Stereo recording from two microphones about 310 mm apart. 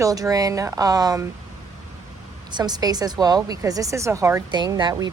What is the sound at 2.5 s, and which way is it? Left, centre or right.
Speech, centre.